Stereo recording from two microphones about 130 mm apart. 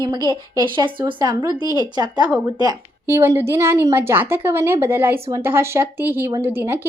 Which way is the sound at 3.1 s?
20° right (ahead or behind).